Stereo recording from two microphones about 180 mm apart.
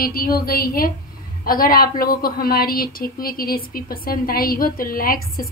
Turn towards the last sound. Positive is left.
turn(degrees=55)  # may be behind; listen again after turning